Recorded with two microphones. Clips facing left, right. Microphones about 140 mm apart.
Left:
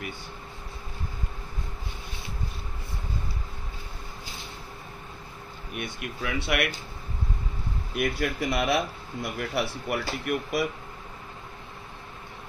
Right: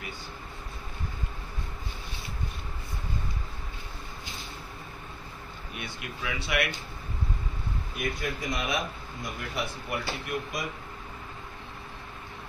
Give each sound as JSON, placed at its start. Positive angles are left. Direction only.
{"t": 6.2, "sound": "speech", "side_deg": 55}
{"t": 7.9, "sound": "speech", "side_deg": 70}